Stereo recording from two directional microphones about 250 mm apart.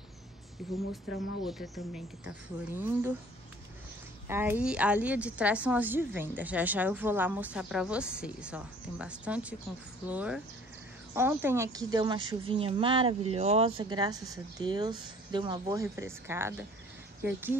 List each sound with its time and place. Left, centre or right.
1.4 s a woman's voice: centre
4.3 s a woman's voice: centre